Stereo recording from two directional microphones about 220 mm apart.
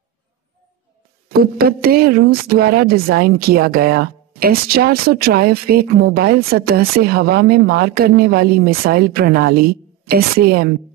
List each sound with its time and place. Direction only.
1.4 s speech: 45° right (ahead or behind)